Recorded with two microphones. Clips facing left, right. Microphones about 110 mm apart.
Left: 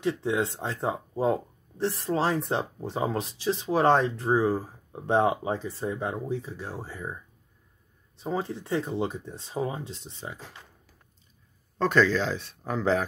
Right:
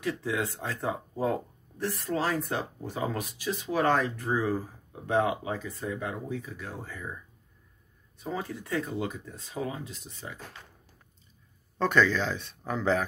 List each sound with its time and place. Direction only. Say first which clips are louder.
0.0 s speech: left 4 dB; 25° left (ahead or behind)
8.2 s speech: left 4 dB; 25° left (ahead or behind)
11.8 s speech: left 2 dB; centre (ahead or behind)